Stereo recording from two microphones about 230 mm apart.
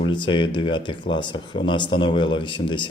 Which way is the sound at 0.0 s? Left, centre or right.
Left.